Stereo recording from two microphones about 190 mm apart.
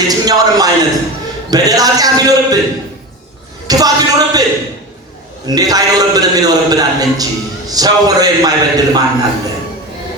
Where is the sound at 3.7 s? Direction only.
20° right (ahead or behind).